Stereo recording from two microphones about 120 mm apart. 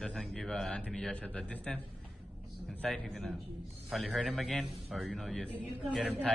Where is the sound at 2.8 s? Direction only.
Centre (ahead or behind).